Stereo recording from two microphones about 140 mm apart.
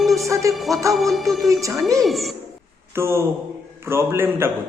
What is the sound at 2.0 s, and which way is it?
Music, centre (ahead or behind).